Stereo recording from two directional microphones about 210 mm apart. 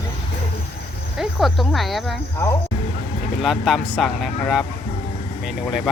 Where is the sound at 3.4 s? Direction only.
Centre (ahead or behind).